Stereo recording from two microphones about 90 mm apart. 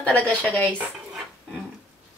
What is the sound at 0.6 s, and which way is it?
Speech, 15° right (ahead or behind).